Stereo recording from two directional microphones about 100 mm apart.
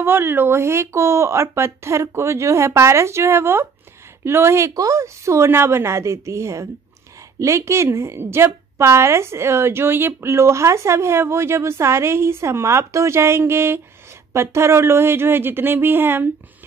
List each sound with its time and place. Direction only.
0.0 s a woman's voice: 25° right (ahead or behind)